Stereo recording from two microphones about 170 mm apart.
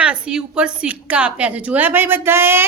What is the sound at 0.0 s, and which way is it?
Speech, 5° right (ahead or behind).